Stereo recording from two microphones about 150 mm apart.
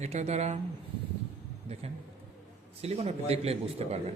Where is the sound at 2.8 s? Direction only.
45° right (ahead or behind).